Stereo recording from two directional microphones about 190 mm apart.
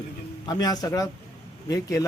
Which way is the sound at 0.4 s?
20° left (ahead or behind).